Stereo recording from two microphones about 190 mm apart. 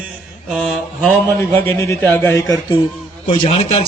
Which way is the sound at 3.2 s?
30° left (ahead or behind).